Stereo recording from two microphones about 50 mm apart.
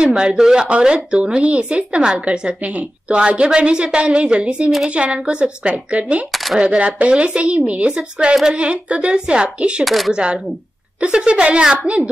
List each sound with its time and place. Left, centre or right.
0.0 s speech: centre
9.8 s speech: centre
10.1 s speech: right